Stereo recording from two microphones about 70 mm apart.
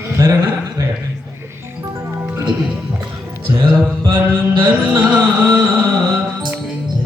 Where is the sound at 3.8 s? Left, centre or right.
Right.